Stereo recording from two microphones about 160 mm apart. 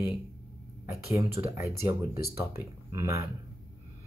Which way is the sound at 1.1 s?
20° right (ahead or behind).